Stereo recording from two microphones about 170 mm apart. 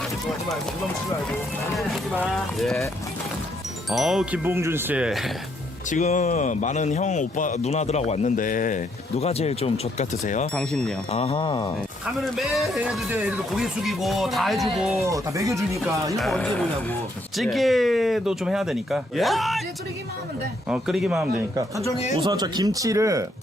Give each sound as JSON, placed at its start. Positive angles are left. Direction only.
{"t": 1.3, "sound": "speech", "side_deg": 0}
{"t": 3.8, "sound": "speech", "side_deg": 0}
{"t": 5.9, "sound": "a man's voice", "side_deg": 45}
{"t": 9.1, "sound": "speech", "side_deg": 40}
{"t": 10.5, "sound": "speech", "side_deg": 5}
{"t": 11.1, "sound": "speech", "side_deg": 35}
{"t": 12.0, "sound": "speech", "side_deg": 0}
{"t": 15.0, "sound": "speech", "side_deg": -20}
{"t": 16.1, "sound": "speech", "side_deg": 0}
{"t": 20.7, "sound": "speech", "side_deg": -5}
{"t": 22.1, "sound": "speech", "side_deg": -25}